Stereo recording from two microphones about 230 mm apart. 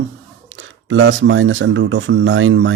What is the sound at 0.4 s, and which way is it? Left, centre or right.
Speech, right.